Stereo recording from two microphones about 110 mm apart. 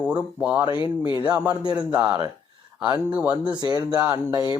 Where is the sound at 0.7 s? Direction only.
50° left (ahead or behind).